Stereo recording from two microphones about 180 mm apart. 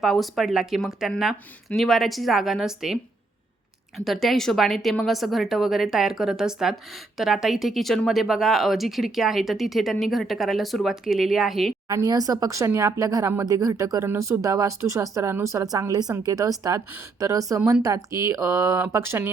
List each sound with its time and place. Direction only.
0.0 s speech: centre (ahead or behind)
11.9 s speech: 20° right (ahead or behind)
17.6 s speech: 5° right (ahead or behind)
17.8 s speech: 20° right (ahead or behind)